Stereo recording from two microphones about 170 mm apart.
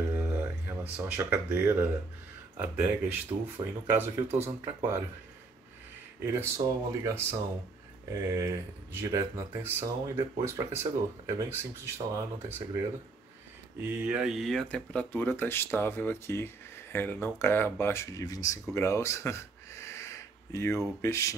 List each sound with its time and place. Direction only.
0.4 s speech: 10° right (ahead or behind)
6.2 s speech: 15° right (ahead or behind)
13.7 s speech: 10° right (ahead or behind); by 18.6 s 20° left (ahead or behind)
18.8 s a sound: 15° left (ahead or behind)
21.0 s speech: 15° left (ahead or behind)